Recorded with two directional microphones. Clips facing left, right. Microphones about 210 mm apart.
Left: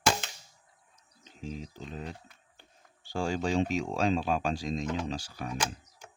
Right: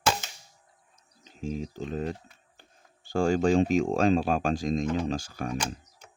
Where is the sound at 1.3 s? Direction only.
50° right (ahead or behind).